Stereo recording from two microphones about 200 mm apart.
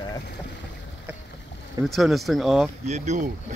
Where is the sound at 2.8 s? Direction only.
35° right (ahead or behind).